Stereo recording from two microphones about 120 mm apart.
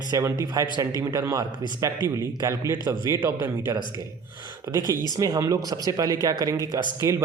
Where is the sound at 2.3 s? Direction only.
25° right (ahead or behind).